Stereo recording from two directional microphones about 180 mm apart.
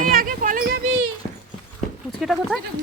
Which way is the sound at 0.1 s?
50° right (ahead or behind).